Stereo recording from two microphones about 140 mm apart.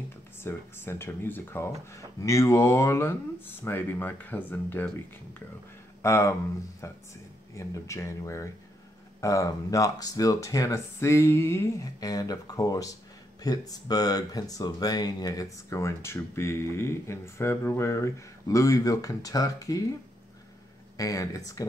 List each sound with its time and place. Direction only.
0.4 s speech: 15° left (ahead or behind)
21.0 s speech: 25° left (ahead or behind)